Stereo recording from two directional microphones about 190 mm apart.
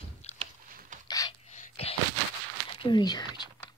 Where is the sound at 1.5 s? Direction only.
35° left (ahead or behind).